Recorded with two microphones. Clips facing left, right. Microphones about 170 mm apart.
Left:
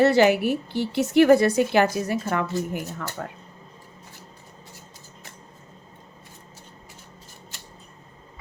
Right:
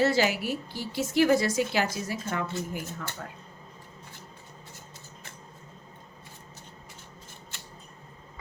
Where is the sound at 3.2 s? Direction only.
65° left (ahead or behind).